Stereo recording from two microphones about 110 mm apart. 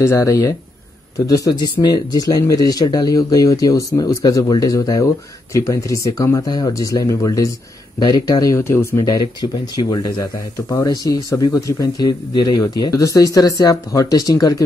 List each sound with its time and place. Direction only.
0.0 s speech: 25° left (ahead or behind)
8.9 s speech: 40° left (ahead or behind)